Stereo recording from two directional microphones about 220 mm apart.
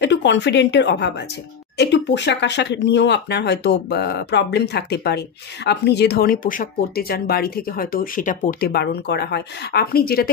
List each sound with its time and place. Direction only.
0.0 s a woman's voice: 55° left (ahead or behind)